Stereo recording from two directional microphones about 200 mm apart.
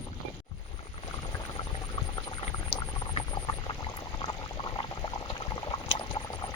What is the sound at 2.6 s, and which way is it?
Boiling, 25° left (ahead or behind).